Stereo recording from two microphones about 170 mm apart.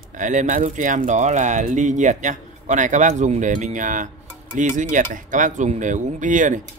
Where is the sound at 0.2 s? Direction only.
50° right (ahead or behind).